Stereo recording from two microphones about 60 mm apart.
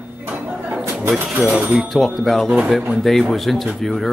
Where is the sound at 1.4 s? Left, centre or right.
Centre.